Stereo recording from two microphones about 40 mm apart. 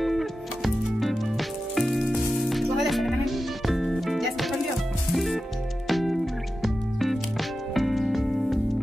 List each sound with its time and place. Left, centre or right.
0.0 s music: centre
1.8 s rain on surface: centre
2.4 s music: centre